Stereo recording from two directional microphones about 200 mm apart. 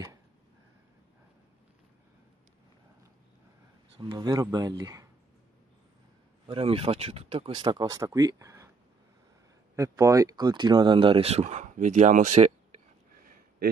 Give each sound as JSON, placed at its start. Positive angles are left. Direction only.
{"t": 4.0, "sound": "speech", "side_deg": -20}
{"t": 6.4, "sound": "speech", "side_deg": -25}
{"t": 9.8, "sound": "speech", "side_deg": -15}